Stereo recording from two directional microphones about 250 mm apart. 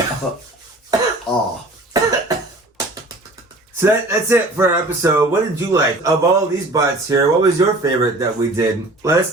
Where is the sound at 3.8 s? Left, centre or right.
Centre.